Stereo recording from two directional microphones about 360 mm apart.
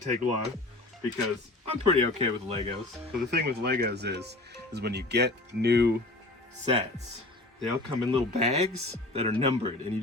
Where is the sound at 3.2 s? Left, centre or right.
Right.